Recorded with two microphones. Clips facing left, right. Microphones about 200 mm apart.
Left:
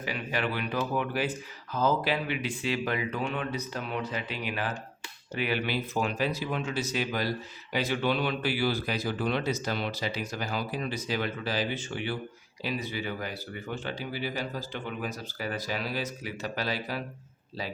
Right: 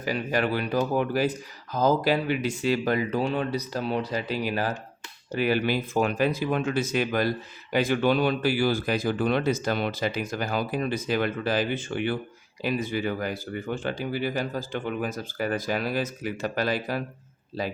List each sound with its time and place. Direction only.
0.0 s speech: 40° right (ahead or behind)